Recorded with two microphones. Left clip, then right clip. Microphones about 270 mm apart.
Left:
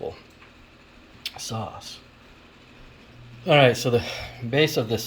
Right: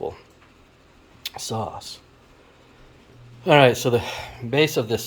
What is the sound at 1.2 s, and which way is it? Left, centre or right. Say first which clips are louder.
Speech: right 4 dB; centre.